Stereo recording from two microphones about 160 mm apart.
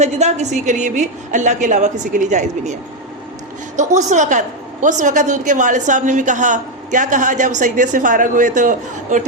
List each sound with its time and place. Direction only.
0.0 s a woman's voice: 45° right (ahead or behind)
3.8 s a woman's voice: 50° right (ahead or behind)